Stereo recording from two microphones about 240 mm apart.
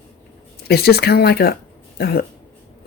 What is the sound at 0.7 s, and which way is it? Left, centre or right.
Speech, left.